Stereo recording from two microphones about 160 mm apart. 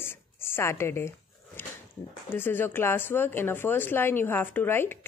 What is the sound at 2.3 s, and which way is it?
Speech, 15° left (ahead or behind).